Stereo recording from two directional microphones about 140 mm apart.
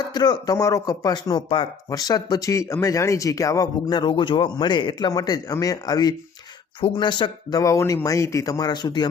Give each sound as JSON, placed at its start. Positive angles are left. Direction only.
{"t": 0.1, "sound": "speech", "side_deg": 30}